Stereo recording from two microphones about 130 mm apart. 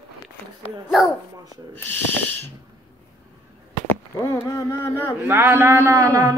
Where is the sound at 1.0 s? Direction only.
5° right (ahead or behind).